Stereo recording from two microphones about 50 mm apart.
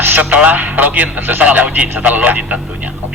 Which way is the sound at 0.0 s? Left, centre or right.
Right.